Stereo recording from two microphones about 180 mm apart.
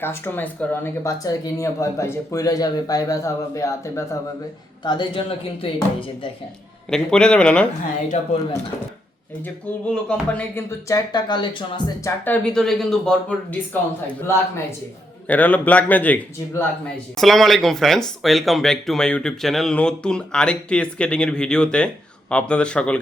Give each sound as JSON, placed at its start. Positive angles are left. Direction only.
{"t": 0.0, "sound": "speech", "side_deg": 10}
{"t": 4.8, "sound": "speech", "side_deg": 25}
{"t": 6.9, "sound": "speech", "side_deg": 5}
{"t": 8.1, "sound": "speech", "side_deg": 35}
{"t": 9.9, "sound": "speech", "side_deg": 5}
{"t": 12.0, "sound": "speech", "side_deg": 10}